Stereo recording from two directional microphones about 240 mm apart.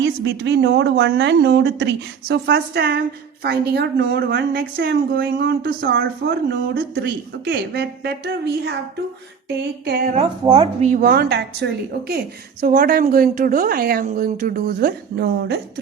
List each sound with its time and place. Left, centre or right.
0.0 s speech: right
9.8 s speech: right
10.4 s speech: right